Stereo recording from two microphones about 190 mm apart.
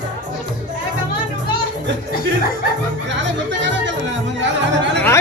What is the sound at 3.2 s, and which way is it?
Speech, 70° right (ahead or behind).